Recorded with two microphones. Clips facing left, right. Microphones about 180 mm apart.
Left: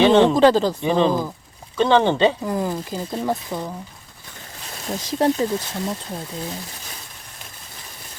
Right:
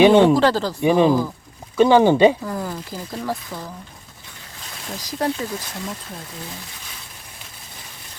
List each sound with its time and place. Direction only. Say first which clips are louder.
0.0 s speech: right 2 dB; 10° right (ahead or behind)
0.3 s speech: left 3 dB; 20° left (ahead or behind)
0.8 s speech: right 3 dB; 15° right (ahead or behind)
2.4 s speech: left 4 dB; 20° left (ahead or behind)
4.9 s speech: left 4 dB; 25° left (ahead or behind)